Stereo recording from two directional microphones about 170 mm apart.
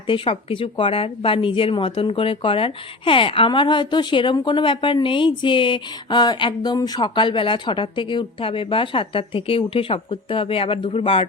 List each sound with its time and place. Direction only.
0.1 s speech: 35° left (ahead or behind)